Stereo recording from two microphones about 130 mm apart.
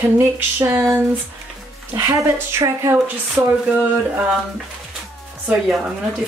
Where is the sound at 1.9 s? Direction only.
20° right (ahead or behind).